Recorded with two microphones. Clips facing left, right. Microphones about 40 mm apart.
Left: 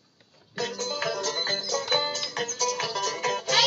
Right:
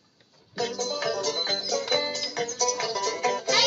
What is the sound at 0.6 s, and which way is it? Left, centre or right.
Music, left.